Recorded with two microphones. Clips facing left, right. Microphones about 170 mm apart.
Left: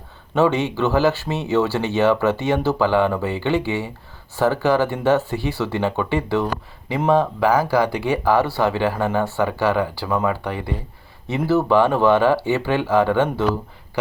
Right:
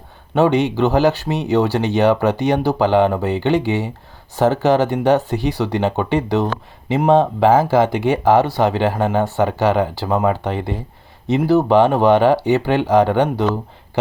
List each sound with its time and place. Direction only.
0.3 s speech: 15° right (ahead or behind)